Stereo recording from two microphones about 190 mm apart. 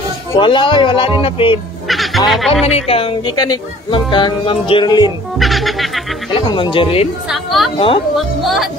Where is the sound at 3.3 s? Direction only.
20° left (ahead or behind).